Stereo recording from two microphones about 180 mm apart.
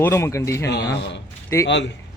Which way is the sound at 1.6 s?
80° left.